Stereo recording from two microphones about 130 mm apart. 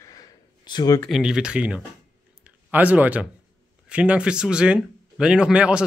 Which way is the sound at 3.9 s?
10° right (ahead or behind).